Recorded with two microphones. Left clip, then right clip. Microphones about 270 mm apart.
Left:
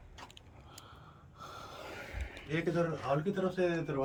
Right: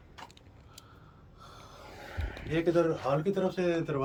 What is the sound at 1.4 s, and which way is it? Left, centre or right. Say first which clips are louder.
Gasp: left 4 dB; centre.